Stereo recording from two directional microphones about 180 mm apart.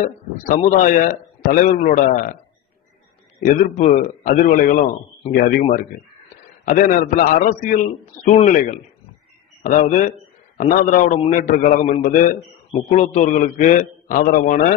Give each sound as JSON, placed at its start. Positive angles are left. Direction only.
{"t": 0.0, "sound": "a man's voice", "side_deg": 50}
{"t": 3.4, "sound": "a man's voice", "side_deg": 45}